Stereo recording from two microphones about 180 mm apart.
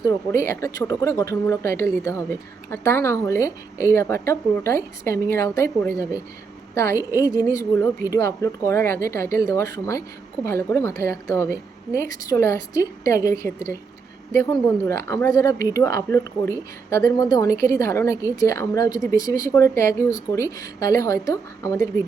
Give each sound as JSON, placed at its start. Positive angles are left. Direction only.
{"t": 0.0, "sound": "a woman's voice", "side_deg": 20}